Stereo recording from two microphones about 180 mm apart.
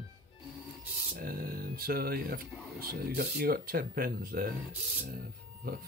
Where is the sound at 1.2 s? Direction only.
55° right (ahead or behind).